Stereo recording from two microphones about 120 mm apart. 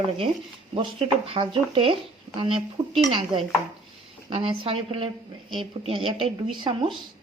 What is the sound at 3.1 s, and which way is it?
Speech, 40° right (ahead or behind).